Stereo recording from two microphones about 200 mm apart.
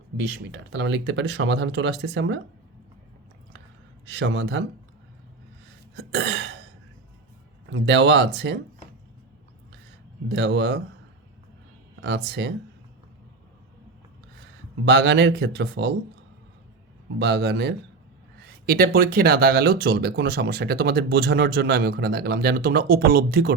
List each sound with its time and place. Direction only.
0.3 s speech: 60° right (ahead or behind)
4.1 s speech: 60° right (ahead or behind)
6.0 s throat clearing: 55° right (ahead or behind)
7.7 s speech: 60° right (ahead or behind)
10.2 s speech: 60° right (ahead or behind)
12.0 s speech: 60° right (ahead or behind)
14.8 s speech: 55° right (ahead or behind)
17.2 s speech: 55° right (ahead or behind)